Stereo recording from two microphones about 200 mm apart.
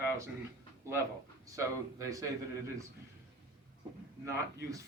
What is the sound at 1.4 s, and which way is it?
A man's voice, 15° right (ahead or behind).